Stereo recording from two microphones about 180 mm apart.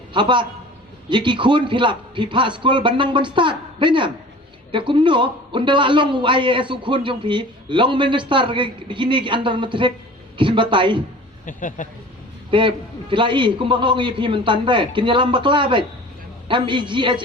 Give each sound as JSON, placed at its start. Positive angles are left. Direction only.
{"t": 0.1, "sound": "a man's voice", "side_deg": -25}
{"t": 11.4, "sound": "speech", "side_deg": 45}
{"t": 12.5, "sound": "a man's voice", "side_deg": -25}